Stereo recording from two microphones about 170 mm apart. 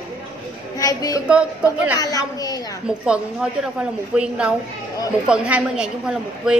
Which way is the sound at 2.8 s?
5° right (ahead or behind).